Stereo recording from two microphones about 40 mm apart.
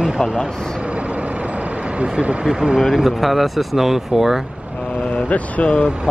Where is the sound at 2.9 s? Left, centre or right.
Centre.